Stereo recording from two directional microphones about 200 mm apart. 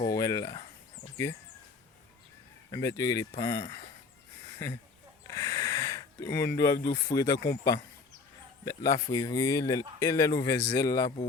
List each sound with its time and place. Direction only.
0.0 s a sound: 15° left (ahead or behind)
2.7 s speech: 15° left (ahead or behind)
5.3 s a sound: 15° left (ahead or behind)
6.9 s speech: 15° left (ahead or behind)
7.3 s speech: 55° left (ahead or behind)
7.6 s speech: 15° left (ahead or behind)